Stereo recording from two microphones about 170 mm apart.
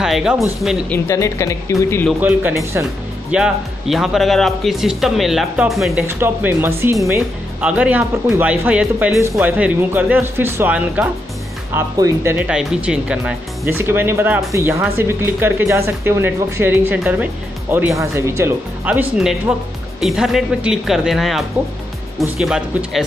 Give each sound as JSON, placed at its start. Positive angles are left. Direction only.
{"t": 0.0, "sound": "speech", "side_deg": -5}
{"t": 0.8, "sound": "speech", "side_deg": 15}
{"t": 2.2, "sound": "speech", "side_deg": -10}
{"t": 6.0, "sound": "speech", "side_deg": -10}